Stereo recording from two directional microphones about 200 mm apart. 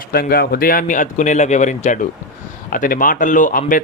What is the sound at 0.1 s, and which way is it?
Speech, 50° left (ahead or behind).